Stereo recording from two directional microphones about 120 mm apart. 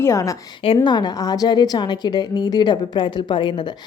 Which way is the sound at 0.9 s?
35° left (ahead or behind).